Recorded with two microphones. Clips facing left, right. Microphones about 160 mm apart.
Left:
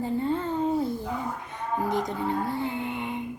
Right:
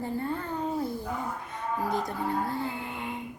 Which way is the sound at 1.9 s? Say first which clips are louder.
Left 2 dB; 20° left (ahead or behind).